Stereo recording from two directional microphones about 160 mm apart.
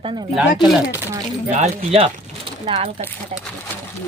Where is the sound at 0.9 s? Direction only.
15° right (ahead or behind).